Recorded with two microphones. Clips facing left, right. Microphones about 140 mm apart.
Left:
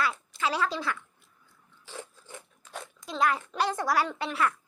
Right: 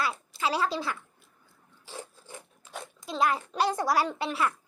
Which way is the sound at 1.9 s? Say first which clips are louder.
Even; 35° right (ahead or behind).